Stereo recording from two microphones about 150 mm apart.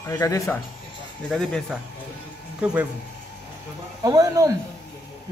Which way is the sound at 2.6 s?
10° right (ahead or behind).